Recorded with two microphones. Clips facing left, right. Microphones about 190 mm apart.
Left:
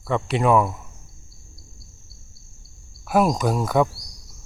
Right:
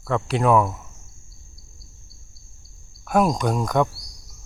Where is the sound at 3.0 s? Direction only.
5° left (ahead or behind).